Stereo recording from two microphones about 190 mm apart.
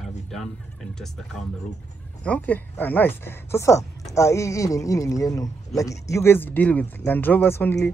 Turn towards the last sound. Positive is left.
turn(degrees=10)  # may be behind; listen again after turning